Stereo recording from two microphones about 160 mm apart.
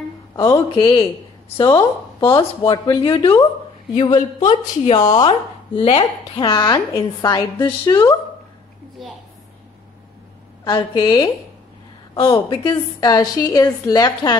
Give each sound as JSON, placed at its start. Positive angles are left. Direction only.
{"t": 0.4, "sound": "a woman's voice", "side_deg": 30}
{"t": 10.6, "sound": "speech", "side_deg": 25}